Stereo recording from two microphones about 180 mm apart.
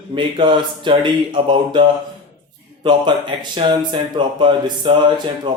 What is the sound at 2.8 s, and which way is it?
Speech, 25° right (ahead or behind).